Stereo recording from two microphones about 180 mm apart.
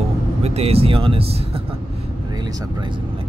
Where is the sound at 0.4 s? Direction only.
35° right (ahead or behind).